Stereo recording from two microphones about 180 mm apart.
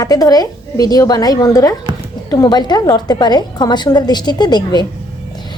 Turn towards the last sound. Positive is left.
turn(degrees=25)  # may be behind; listen again after turning